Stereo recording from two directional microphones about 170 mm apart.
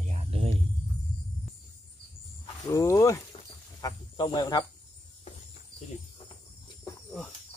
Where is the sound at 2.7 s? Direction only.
15° left (ahead or behind).